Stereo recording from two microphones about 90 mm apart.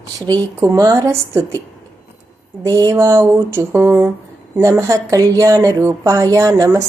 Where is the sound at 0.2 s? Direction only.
40° right (ahead or behind).